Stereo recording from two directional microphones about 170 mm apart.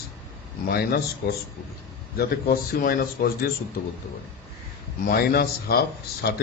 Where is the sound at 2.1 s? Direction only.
60° left (ahead or behind).